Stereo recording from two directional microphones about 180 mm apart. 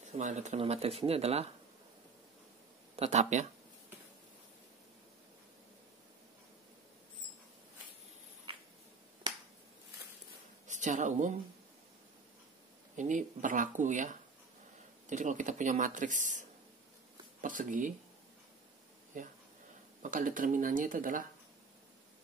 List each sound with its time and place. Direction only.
0.0 s speech: 40° right (ahead or behind)
3.0 s speech: 40° right (ahead or behind)
10.7 s speech: 45° right (ahead or behind)
12.9 s speech: 45° right (ahead or behind)
19.1 s speech: 45° right (ahead or behind)